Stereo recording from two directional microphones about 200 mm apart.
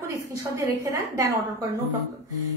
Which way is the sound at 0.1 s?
15° right (ahead or behind).